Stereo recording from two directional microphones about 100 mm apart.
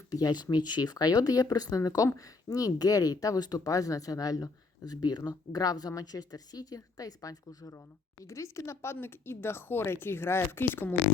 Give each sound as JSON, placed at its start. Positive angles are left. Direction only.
{"t": 0.1, "sound": "speech", "side_deg": 40}